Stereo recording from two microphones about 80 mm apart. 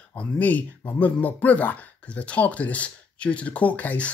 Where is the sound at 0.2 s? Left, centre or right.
Centre.